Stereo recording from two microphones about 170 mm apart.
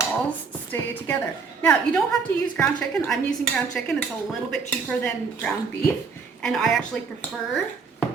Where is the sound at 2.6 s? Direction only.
5° left (ahead or behind).